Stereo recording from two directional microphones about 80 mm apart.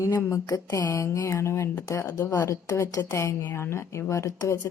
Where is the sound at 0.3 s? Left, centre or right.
Left.